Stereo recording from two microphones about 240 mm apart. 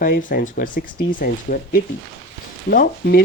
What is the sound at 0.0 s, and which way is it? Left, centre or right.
Speech, left.